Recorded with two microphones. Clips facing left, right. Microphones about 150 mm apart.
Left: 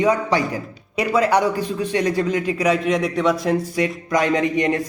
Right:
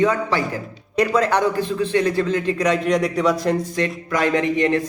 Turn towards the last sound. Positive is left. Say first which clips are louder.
# right 1 dB
turn(degrees=15)  # may be behind; listen again after turning